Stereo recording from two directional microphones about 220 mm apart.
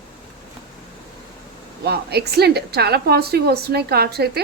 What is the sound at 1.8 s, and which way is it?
A woman's voice, 45° right (ahead or behind).